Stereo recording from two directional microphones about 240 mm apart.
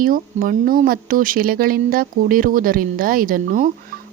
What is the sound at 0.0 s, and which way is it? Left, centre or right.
Speech, right.